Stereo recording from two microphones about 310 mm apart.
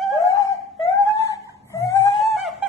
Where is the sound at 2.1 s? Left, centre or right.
Centre.